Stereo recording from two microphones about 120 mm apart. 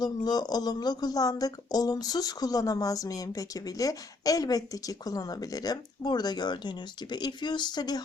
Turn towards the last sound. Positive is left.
turn(degrees=35)  # may be behind; listen again after turning